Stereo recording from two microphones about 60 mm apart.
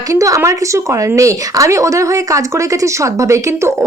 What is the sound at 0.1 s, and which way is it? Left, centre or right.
Speech, right.